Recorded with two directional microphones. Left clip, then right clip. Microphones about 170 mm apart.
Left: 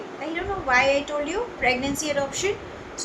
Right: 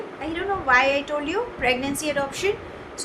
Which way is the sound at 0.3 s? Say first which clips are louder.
Right 2 dB; 30° right (ahead or behind).